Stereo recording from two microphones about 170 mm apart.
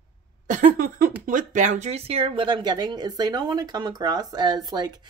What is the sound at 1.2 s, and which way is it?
A woman's voice, 50° right (ahead or behind).